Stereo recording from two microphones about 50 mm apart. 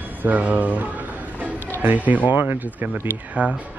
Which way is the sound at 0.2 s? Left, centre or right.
Right.